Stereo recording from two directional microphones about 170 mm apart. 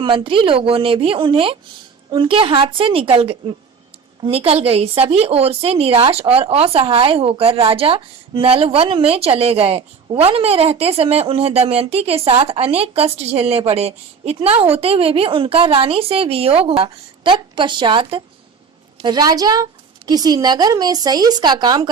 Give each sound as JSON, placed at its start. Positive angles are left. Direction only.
{"t": 0.0, "sound": "a woman's voice", "side_deg": -30}